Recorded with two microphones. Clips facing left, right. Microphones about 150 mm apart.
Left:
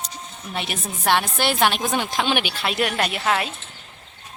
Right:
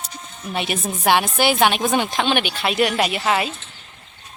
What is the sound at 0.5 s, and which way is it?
Speech, 5° right (ahead or behind).